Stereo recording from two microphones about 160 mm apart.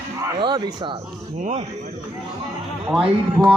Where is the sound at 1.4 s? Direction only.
50° right (ahead or behind).